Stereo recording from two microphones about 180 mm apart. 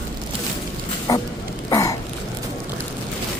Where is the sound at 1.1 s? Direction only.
20° left (ahead or behind).